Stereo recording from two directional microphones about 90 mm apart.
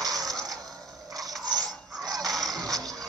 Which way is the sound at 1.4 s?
45° right (ahead or behind).